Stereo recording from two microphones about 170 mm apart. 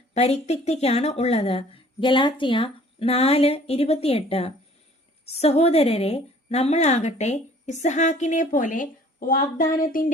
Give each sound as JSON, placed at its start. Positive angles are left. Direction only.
{"t": 0.1, "sound": "a woman's voice", "side_deg": 40}